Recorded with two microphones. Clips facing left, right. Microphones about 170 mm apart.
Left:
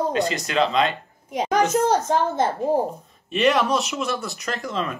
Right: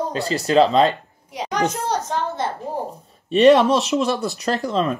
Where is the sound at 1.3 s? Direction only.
45° left (ahead or behind).